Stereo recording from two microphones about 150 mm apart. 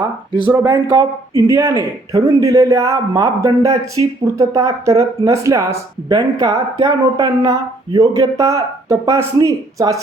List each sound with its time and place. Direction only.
0.5 s speech: 20° right (ahead or behind)
6.1 s speech: 30° right (ahead or behind)